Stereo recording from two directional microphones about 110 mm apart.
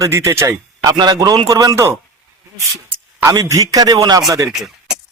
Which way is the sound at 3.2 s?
30° right (ahead or behind).